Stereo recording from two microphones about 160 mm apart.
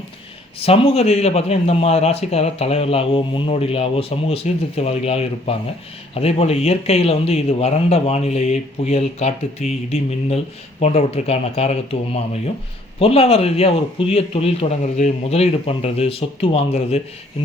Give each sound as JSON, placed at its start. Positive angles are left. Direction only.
{"t": 0.6, "sound": "a man's voice", "side_deg": 35}